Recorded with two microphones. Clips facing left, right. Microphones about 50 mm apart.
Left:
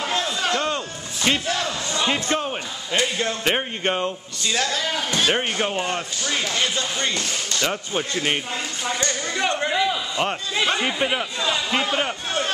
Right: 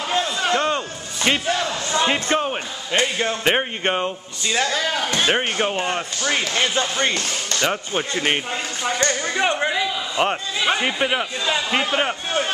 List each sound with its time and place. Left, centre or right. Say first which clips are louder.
0.1 s music: right 5 dB; centre
1.7 s crowd: right 3 dB; right
2.2 s a man's voice: right 3 dB; centre
6.2 s speech: right 3 dB; right
7.6 s a man's voice: right 3 dB; centre